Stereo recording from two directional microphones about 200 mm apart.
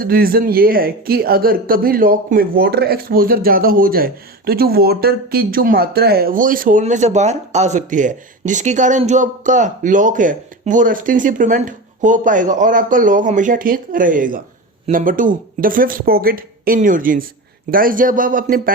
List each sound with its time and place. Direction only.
0.0 s speech: 50° right (ahead or behind)